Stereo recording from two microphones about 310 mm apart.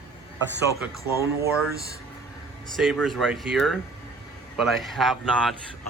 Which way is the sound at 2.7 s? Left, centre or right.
Centre.